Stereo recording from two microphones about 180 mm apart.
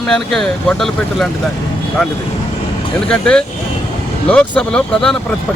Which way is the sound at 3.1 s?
5° left (ahead or behind).